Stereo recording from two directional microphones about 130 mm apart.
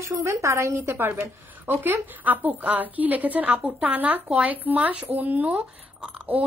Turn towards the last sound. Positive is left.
turn(degrees=-10)  # may be behind; listen again after turning